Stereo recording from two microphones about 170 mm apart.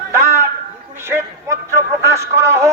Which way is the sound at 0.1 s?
15° right (ahead or behind).